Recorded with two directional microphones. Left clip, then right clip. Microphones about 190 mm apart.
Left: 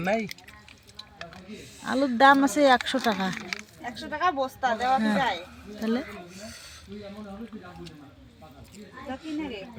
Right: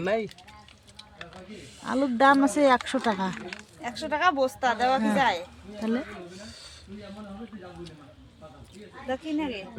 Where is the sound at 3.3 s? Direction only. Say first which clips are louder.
Left 4 dB; 35° left (ahead or behind).